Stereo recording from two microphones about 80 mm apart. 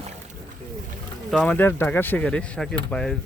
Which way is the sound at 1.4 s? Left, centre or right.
Left.